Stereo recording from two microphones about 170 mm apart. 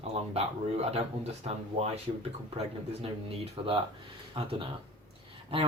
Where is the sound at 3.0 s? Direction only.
35° right (ahead or behind).